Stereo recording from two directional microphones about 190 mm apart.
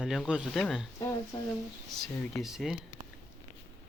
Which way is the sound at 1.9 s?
Centre (ahead or behind).